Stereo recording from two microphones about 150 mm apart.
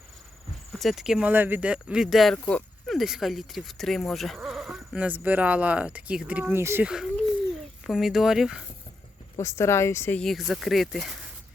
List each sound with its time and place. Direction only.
0.7 s speech: centre (ahead or behind); by 6.8 s 15° right (ahead or behind)
6.8 s speech: 5° right (ahead or behind)
9.4 s speech: 20° left (ahead or behind)
10.2 s speech: centre (ahead or behind)